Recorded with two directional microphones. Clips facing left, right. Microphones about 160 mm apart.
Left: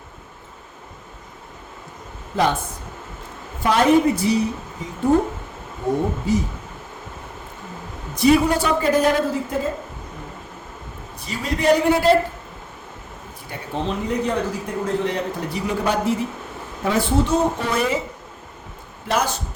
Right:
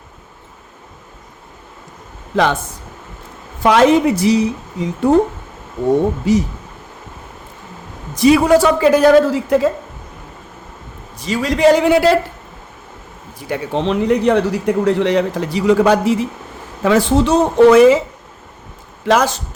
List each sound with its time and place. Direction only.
2.3 s speech: 90° right
3.6 s speech: 90° right
6.3 s speech: 90° right
8.1 s speech: 90° right
11.2 s speech: 90° right
13.5 s speech: 85° right
19.0 s speech: 90° right